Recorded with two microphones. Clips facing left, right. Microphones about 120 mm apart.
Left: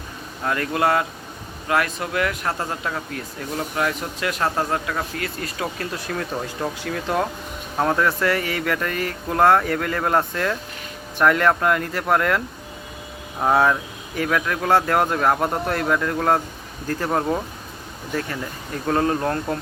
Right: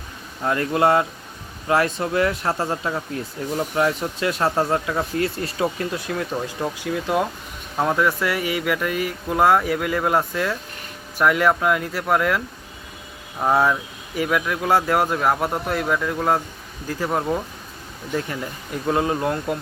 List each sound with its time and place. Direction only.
0.4 s speech: 25° right (ahead or behind)
5.8 s speech: 10° right (ahead or behind)
13.4 s speech: centre (ahead or behind)
18.3 s speech: 10° right (ahead or behind)